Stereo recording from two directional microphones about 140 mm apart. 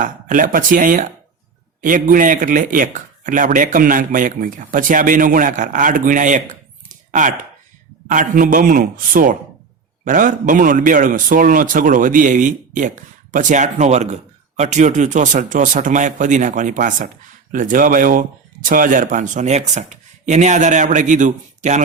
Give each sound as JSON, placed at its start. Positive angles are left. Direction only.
{"t": 0.0, "sound": "a man's voice", "side_deg": -70}
{"t": 10.0, "sound": "a man's voice", "side_deg": -70}